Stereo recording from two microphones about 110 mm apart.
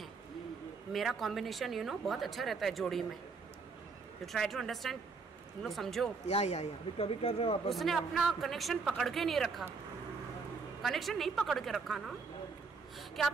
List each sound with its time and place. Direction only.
0.9 s a woman's voice: centre (ahead or behind)
4.3 s a woman's voice: centre (ahead or behind)
6.2 s speech: 90° left; by 7.7 s 60° left (ahead or behind)
7.7 s a woman's voice: centre (ahead or behind)
10.8 s a woman's voice: centre (ahead or behind)